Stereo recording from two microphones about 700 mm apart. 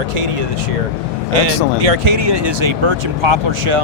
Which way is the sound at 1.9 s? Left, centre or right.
Right.